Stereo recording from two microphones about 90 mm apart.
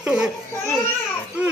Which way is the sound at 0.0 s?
10° right (ahead or behind).